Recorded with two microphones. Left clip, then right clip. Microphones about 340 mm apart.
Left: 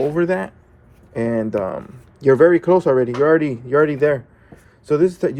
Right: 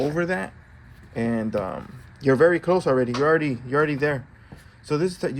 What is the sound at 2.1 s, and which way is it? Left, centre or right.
Speech, centre.